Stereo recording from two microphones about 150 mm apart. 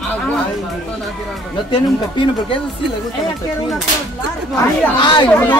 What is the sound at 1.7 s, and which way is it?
Speech, 35° left (ahead or behind).